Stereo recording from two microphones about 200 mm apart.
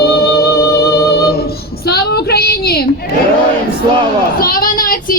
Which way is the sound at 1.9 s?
50° left (ahead or behind).